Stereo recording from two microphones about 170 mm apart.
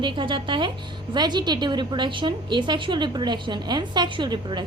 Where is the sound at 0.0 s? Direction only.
30° right (ahead or behind).